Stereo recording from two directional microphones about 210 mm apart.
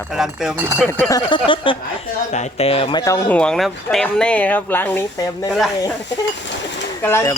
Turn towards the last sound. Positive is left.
turn(degrees=10)  # may be behind; listen again after turning